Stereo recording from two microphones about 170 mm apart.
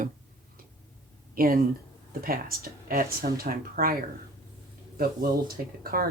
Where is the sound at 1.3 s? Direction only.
60° right (ahead or behind).